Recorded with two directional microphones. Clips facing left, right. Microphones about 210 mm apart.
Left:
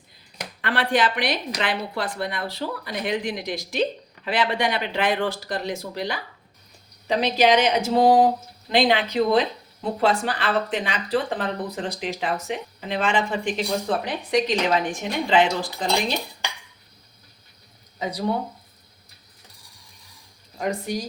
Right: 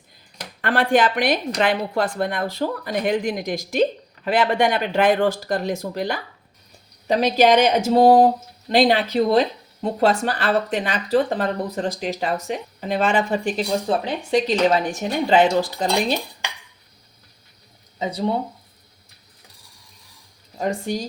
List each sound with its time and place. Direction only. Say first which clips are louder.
0.6 s speech: right 4 dB; 50° right (ahead or behind); by 14.5 s 30° right (ahead or behind)
15.3 s speech: right 4 dB; 40° right (ahead or behind)
18.0 s speech: right 2 dB; 25° right (ahead or behind)
20.6 s speech: right 2 dB; 30° right (ahead or behind)